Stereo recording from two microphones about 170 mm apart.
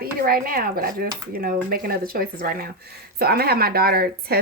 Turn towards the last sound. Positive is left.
turn(degrees=-65)  # may be behind; listen again after turning